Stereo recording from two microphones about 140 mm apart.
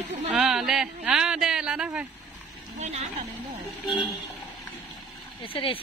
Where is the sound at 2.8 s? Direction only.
55° right (ahead or behind).